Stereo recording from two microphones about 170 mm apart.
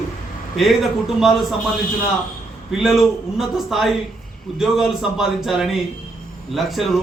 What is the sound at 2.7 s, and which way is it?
A man's voice, centre (ahead or behind).